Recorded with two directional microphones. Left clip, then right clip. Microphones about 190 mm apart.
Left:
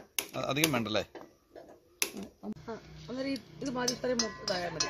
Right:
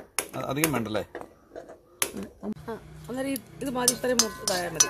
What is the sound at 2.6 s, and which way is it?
Speech, 10° right (ahead or behind).